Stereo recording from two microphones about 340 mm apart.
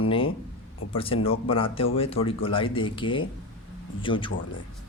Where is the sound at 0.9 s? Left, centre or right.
Centre.